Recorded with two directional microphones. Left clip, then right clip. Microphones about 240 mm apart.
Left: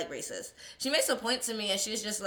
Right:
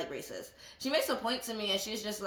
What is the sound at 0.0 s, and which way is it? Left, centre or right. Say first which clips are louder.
A woman's voice: left 2 dB; right.